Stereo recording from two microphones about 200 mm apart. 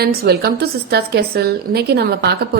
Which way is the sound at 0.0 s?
50° right (ahead or behind).